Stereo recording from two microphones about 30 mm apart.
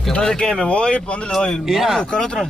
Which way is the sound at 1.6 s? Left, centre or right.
Centre.